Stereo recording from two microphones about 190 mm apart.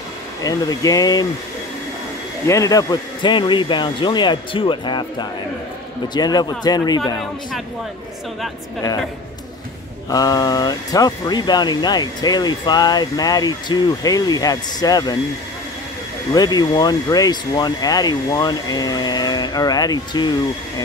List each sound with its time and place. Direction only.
0.4 s speech: 20° left (ahead or behind)
2.4 s speech: 15° left (ahead or behind)
10.0 s speech: 20° left (ahead or behind)
16.3 s speech: 20° left (ahead or behind)